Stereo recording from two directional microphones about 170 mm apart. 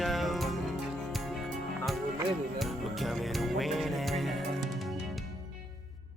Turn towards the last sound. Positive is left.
turn(degrees=0)  # may be behind; listen again after turning